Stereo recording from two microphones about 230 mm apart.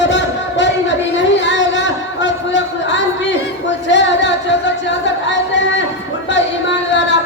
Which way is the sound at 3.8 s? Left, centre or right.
Left.